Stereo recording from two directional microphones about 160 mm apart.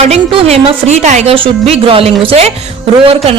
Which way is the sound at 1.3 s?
35° right (ahead or behind).